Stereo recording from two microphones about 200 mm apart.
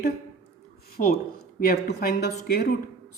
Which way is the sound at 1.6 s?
50° left (ahead or behind).